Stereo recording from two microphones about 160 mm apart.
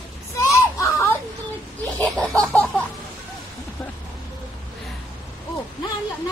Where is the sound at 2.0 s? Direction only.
5° left (ahead or behind).